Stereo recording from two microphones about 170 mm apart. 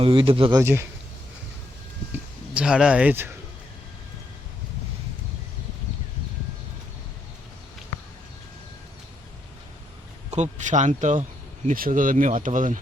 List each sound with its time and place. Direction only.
0.0 s speech: 30° right (ahead or behind)
0.6 s speech: 15° right (ahead or behind)
2.1 s speech: 5° right (ahead or behind)
10.3 s speech: 45° right (ahead or behind)